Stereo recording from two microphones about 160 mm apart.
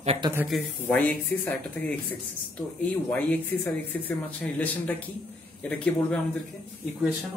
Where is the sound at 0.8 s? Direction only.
10° left (ahead or behind).